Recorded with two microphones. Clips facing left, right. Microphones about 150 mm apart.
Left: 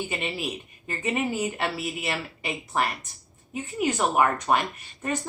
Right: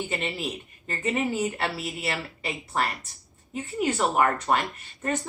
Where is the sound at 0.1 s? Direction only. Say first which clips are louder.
Even; 10° left (ahead or behind).